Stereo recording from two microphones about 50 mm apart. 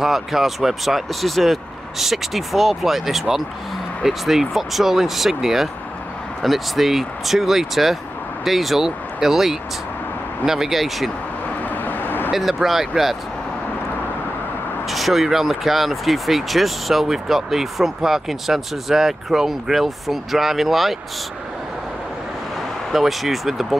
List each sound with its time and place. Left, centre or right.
0.0 s speech: centre
11.7 s vehicle: left
12.3 s speech: centre
14.9 s speech: centre
22.9 s speech: centre